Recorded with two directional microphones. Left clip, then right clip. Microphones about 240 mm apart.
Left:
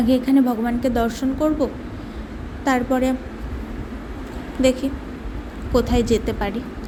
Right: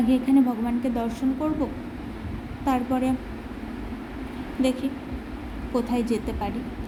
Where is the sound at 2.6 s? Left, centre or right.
Centre.